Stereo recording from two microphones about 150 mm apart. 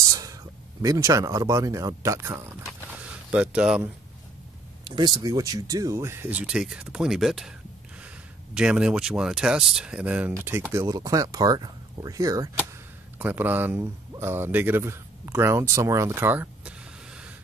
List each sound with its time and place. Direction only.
0.1 s speech: 25° right (ahead or behind)
3.0 s a sound: 10° right (ahead or behind)
4.8 s speech: 30° right (ahead or behind); by 7.5 s centre (ahead or behind)
8.5 s speech: 5° right (ahead or behind); by 12.4 s 25° right (ahead or behind)
13.2 s speech: 10° right (ahead or behind)